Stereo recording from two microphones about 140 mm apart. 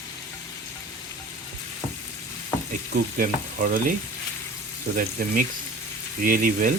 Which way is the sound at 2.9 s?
80° right.